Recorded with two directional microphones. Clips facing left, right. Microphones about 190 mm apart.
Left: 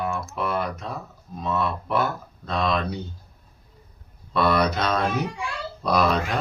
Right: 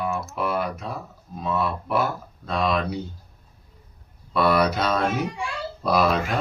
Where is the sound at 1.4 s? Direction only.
5° right (ahead or behind).